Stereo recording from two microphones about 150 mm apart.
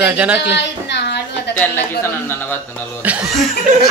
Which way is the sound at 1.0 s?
90° left.